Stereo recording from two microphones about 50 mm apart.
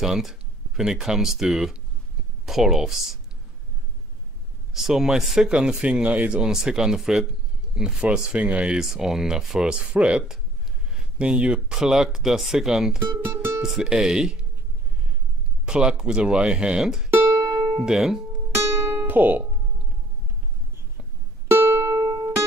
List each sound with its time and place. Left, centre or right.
0.0 s speech: centre
4.7 s speech: centre
7.7 s speech: centre
15.6 s speech: centre
17.3 s music: right
17.8 s speech: centre
18.5 s music: right
19.0 s speech: right
21.5 s music: right
21.8 s music: right